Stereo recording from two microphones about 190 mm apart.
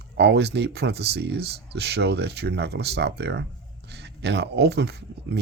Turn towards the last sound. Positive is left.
turn(degrees=-60)  # may be behind; listen again after turning